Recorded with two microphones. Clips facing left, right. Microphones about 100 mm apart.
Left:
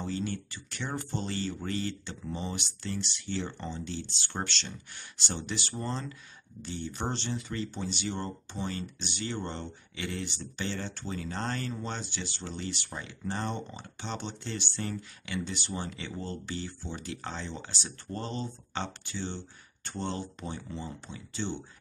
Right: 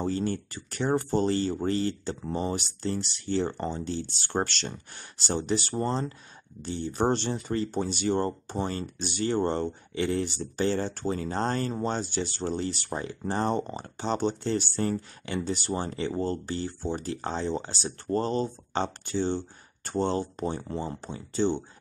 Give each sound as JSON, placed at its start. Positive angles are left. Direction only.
{"t": 0.0, "sound": "speech", "side_deg": -40}